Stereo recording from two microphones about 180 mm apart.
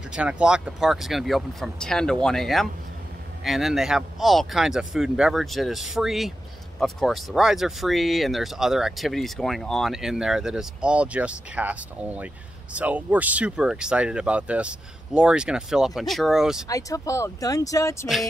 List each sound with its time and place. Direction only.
0.1 s speech: 5° right (ahead or behind)
16.6 s speech: 20° left (ahead or behind)
18.0 s speech: centre (ahead or behind)